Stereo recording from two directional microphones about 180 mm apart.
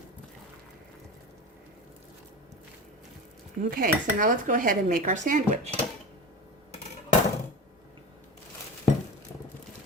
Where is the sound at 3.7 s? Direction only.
50° right (ahead or behind).